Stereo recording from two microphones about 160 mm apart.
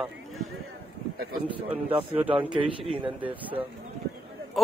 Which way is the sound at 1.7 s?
10° right (ahead or behind).